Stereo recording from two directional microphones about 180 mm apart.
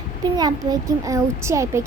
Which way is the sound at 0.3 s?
20° right (ahead or behind).